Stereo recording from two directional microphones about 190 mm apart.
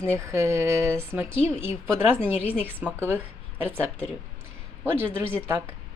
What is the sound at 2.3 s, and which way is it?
A woman's voice, 10° right (ahead or behind).